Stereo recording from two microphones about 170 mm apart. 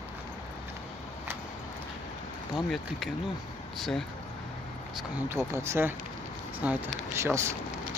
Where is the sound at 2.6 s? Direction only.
Centre (ahead or behind).